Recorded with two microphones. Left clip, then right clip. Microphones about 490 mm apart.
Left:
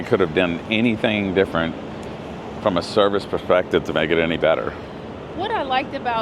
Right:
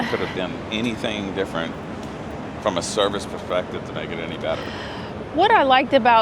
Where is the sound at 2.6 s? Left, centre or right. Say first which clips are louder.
Left 3 dB; left.